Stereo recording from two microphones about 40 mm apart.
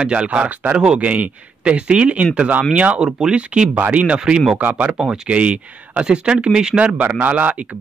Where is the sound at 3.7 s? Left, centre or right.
Right.